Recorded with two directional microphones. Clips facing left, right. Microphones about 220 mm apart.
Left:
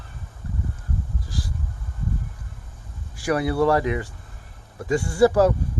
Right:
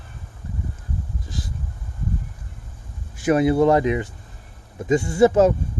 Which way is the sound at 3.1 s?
20° right (ahead or behind).